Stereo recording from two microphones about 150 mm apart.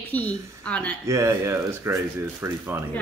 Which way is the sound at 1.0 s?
20° right (ahead or behind).